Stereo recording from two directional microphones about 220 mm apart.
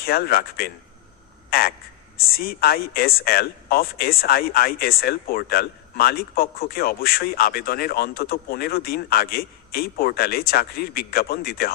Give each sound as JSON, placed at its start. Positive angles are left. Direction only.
{"t": 0.0, "sound": "speech", "side_deg": 45}
{"t": 1.5, "sound": "a sound", "side_deg": 45}
{"t": 2.1, "sound": "speech", "side_deg": 45}